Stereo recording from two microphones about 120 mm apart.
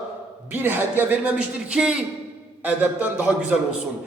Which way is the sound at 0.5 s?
15° right (ahead or behind).